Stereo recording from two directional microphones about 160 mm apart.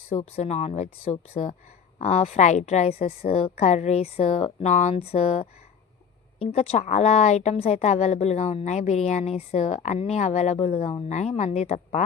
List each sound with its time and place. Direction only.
0.1 s speech: 40° left (ahead or behind)